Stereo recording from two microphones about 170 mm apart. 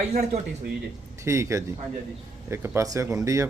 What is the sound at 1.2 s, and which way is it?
A man's voice, 15° right (ahead or behind).